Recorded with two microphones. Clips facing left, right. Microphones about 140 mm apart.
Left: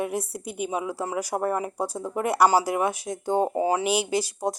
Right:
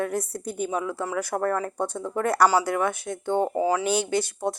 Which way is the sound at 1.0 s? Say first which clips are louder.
Even; 30° left (ahead or behind).